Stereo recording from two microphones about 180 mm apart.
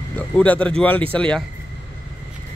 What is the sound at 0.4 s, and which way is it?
Speech, 5° left (ahead or behind).